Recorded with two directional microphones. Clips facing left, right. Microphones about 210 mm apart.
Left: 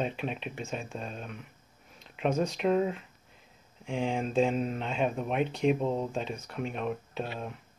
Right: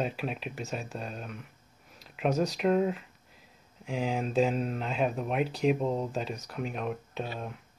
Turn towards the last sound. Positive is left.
turn(degrees=0)  # may be behind; listen again after turning